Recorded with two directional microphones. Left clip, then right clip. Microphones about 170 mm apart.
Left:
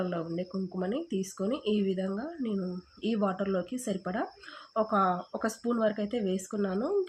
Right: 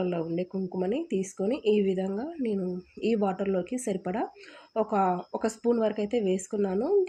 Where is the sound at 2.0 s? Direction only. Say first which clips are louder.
Right 3 dB; 10° right (ahead or behind).